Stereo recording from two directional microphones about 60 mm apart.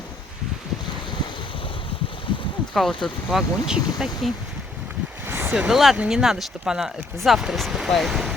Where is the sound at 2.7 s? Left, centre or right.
Centre.